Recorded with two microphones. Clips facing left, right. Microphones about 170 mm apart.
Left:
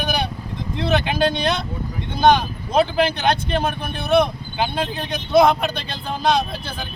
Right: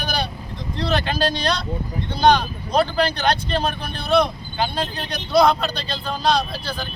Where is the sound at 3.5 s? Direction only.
20° left (ahead or behind).